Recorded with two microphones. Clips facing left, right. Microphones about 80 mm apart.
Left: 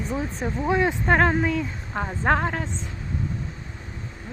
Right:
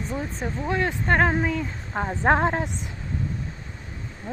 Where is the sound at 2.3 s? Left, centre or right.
Right.